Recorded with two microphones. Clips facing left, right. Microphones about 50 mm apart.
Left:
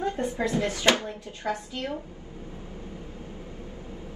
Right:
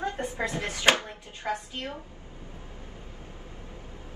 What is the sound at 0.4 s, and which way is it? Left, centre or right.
Speech, right.